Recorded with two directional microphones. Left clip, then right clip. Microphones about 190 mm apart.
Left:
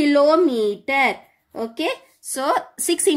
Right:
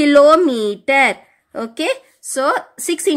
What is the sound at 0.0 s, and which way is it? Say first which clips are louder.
A woman's voice: right 6 dB; 30° right (ahead or behind).